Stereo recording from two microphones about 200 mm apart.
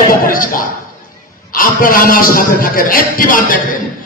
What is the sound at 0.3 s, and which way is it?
A man's voice, 45° left (ahead or behind).